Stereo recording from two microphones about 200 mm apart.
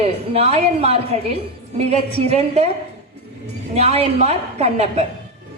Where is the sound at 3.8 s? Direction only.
30° right (ahead or behind).